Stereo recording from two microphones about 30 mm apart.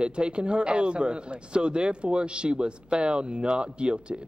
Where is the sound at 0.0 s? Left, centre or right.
Right.